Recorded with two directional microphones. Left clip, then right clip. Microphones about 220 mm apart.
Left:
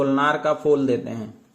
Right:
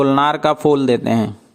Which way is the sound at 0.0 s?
50° right (ahead or behind).